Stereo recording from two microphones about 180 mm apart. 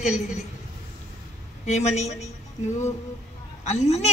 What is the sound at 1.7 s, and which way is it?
Speech, 40° left (ahead or behind).